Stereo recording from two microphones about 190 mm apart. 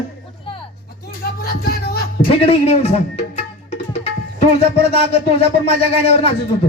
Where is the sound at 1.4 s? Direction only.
55° left (ahead or behind).